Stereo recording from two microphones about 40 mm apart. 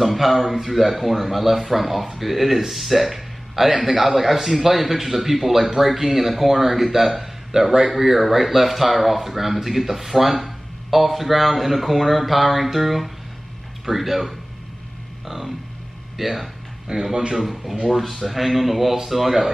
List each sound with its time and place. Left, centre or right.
0.0 s speech: centre
15.2 s music: centre
16.2 s speech: centre
16.8 s speech: centre
17.4 s speech: centre